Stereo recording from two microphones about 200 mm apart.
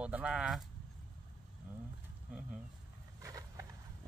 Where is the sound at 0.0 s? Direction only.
5° right (ahead or behind).